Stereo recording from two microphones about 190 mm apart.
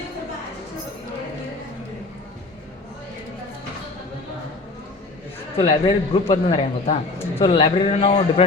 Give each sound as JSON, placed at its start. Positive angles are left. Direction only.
{"t": 5.5, "sound": "a man's voice", "side_deg": 30}